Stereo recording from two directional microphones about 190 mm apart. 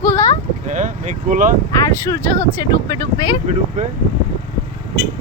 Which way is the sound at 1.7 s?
15° left (ahead or behind).